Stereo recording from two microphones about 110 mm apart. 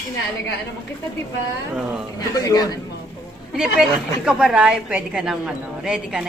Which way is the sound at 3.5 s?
5° right (ahead or behind).